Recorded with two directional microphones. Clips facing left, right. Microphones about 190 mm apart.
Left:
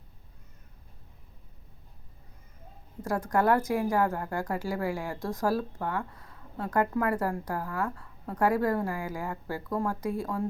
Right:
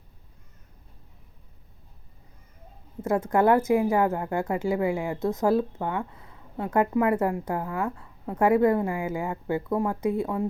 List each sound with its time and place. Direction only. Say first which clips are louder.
3.0 s speech: right 5 dB; 20° right (ahead or behind)